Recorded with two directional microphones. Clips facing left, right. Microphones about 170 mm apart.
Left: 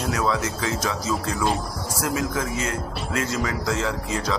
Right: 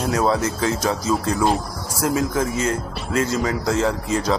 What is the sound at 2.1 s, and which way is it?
A man's voice, 35° right (ahead or behind).